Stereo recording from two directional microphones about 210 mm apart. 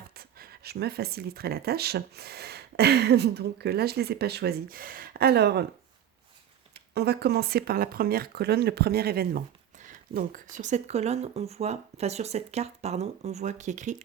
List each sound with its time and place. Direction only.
0.1 s speech: 45° right (ahead or behind)
6.7 s speech: 50° right (ahead or behind); by 13.9 s 35° right (ahead or behind)